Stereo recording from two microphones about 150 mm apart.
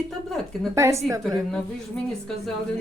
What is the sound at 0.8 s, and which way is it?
Speech, 20° right (ahead or behind).